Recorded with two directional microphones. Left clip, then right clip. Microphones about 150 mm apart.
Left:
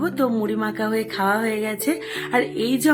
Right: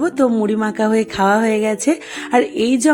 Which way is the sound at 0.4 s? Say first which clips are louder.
Right 6 dB; 40° right (ahead or behind).